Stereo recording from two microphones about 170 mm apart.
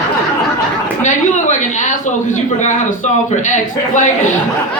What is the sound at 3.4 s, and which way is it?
Speech, 45° left (ahead or behind).